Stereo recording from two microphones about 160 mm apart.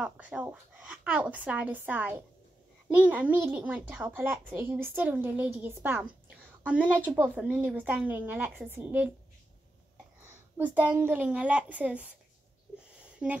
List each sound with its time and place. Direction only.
0.0 s a child's voice: 10° right (ahead or behind)
10.2 s a woman's voice: 10° right (ahead or behind)
13.0 s a sound: 5° right (ahead or behind)